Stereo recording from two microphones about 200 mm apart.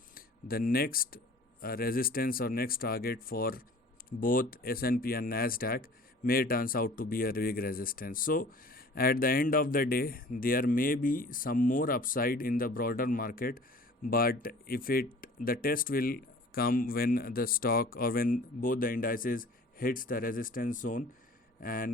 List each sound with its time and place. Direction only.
0.1 s speech: 45° left (ahead or behind)